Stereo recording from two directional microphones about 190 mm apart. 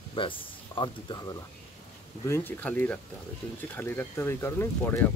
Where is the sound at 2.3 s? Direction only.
10° left (ahead or behind).